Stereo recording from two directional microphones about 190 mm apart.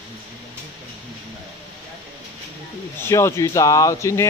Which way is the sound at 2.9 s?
15° left (ahead or behind).